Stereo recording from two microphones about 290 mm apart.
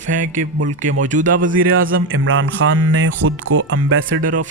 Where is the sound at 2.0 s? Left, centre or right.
Right.